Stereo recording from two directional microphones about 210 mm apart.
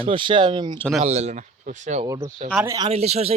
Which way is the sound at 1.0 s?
30° right (ahead or behind).